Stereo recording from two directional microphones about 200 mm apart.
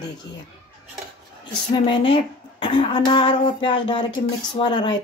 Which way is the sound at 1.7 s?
25° left (ahead or behind).